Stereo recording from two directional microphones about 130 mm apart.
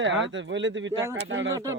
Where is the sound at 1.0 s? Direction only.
25° right (ahead or behind).